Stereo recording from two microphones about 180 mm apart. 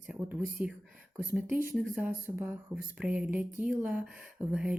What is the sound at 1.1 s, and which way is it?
A woman's voice, 10° right (ahead or behind).